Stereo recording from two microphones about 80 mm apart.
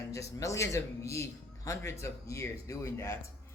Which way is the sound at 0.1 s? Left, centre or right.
Left.